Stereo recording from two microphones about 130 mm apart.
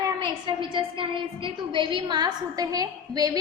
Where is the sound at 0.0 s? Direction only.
40° right (ahead or behind).